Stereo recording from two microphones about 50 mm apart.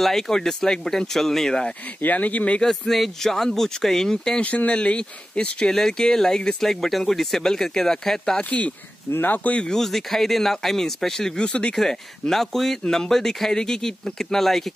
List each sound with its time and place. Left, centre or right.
0.0 s speech: centre
2.0 s speech: left
2.6 s speech: centre
4.4 s speech: left; by 8.4 s centre
8.4 s speech: left
9.1 s speech: left
9.5 s speech: centre
11.7 s speech: centre